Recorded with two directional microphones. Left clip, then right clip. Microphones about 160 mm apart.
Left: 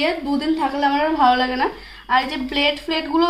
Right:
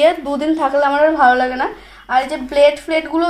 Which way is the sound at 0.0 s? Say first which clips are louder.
Right 7 dB; 45° right (ahead or behind).